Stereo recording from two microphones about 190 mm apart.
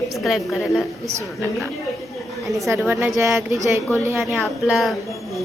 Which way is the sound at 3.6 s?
15° right (ahead or behind).